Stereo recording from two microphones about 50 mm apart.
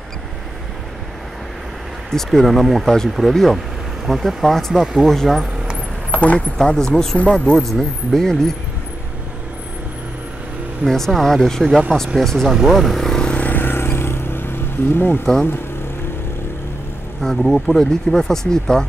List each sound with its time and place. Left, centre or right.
2.0 s speech: centre
6.1 s speech: left
6.6 s speech: centre
10.9 s speech: centre
12.4 s speech: centre
13.5 s vehicle: left
17.2 s speech: centre